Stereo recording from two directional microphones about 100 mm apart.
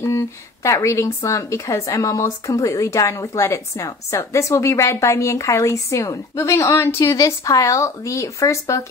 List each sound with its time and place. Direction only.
0.0 s speech: 30° left (ahead or behind)